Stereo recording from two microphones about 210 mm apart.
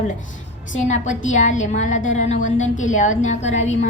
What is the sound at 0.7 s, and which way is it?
A woman's voice, 35° left (ahead or behind).